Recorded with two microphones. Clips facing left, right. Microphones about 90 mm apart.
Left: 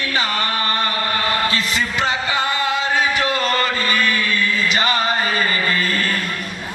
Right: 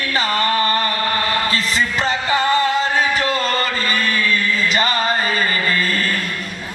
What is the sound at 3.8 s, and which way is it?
Chant, 35° right (ahead or behind).